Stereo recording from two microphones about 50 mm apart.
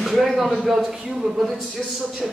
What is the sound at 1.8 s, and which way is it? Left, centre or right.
Speech, centre.